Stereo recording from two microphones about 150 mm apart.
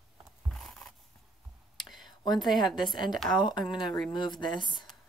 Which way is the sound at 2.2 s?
30° left (ahead or behind).